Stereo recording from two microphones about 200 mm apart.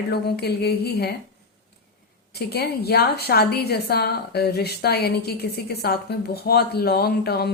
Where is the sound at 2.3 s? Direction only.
55° left (ahead or behind).